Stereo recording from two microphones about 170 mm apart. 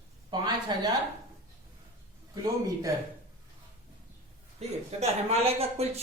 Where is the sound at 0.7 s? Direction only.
25° right (ahead or behind).